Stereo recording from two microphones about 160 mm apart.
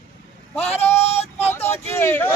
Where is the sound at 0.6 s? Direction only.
40° left (ahead or behind).